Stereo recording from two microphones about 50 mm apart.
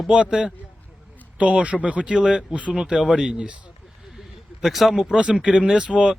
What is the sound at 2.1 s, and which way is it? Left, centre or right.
Speech, centre.